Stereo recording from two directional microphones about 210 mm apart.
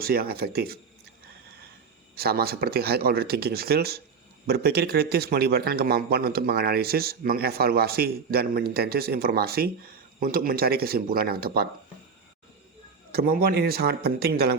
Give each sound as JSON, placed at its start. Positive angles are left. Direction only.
{"t": 0.0, "sound": "speech", "side_deg": -45}
{"t": 2.1, "sound": "speech", "side_deg": -45}
{"t": 13.1, "sound": "speech", "side_deg": -45}